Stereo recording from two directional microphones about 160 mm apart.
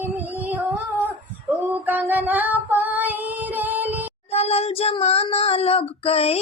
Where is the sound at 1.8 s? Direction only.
10° right (ahead or behind).